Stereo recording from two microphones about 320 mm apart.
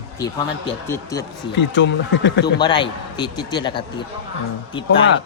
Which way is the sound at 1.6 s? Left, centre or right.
Left.